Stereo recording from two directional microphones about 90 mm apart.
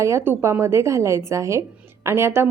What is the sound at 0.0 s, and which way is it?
A woman's voice, 30° right (ahead or behind).